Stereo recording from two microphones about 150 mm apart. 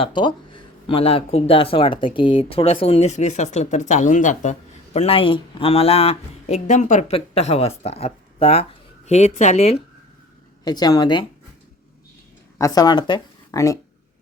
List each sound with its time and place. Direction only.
0.0 s speech: 30° left (ahead or behind); by 4.5 s 55° left (ahead or behind)
4.9 s speech: 40° left (ahead or behind); by 7.0 s 55° left (ahead or behind)
7.1 s speech: 45° left (ahead or behind)
10.6 s speech: 25° left (ahead or behind)
12.5 s speech: 25° left (ahead or behind)